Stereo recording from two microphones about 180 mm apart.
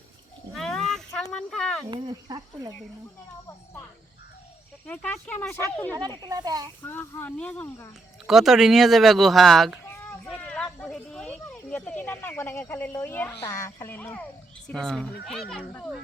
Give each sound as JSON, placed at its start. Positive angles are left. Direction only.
{"t": 0.5, "sound": "a sound", "side_deg": 0}
{"t": 1.9, "sound": "speech", "side_deg": -25}
{"t": 4.9, "sound": "speech", "side_deg": 10}
{"t": 6.0, "sound": "speech", "side_deg": -25}
{"t": 6.8, "sound": "speech", "side_deg": 10}
{"t": 8.3, "sound": "speech", "side_deg": 0}